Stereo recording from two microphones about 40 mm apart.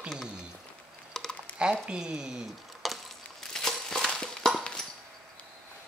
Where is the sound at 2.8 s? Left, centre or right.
Centre.